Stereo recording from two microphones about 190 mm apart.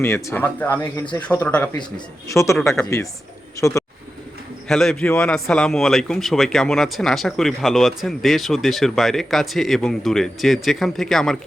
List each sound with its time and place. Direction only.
0.0 s speech: 15° left (ahead or behind)
4.7 s a man's voice: centre (ahead or behind)